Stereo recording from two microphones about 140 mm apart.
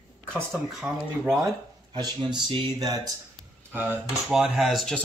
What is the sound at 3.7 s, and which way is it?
Speech, 15° right (ahead or behind).